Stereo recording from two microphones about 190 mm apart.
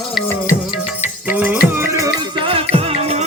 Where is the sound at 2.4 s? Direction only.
30° right (ahead or behind).